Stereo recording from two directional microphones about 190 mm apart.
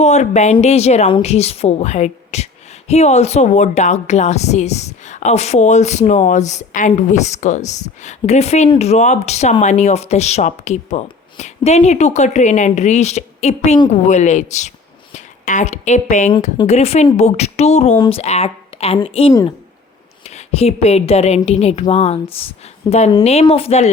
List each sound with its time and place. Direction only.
0.0 s a woman's voice: 35° left (ahead or behind)
19.3 s speech: 20° left (ahead or behind)
20.2 s a woman's voice: 35° left (ahead or behind)